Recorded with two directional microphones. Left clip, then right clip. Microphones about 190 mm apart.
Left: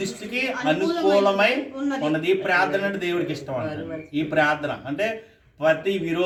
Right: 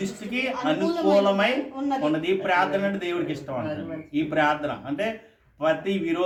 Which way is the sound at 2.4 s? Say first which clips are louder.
Left 1 dB; 15° right (ahead or behind).